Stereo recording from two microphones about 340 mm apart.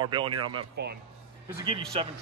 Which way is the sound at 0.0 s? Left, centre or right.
Centre.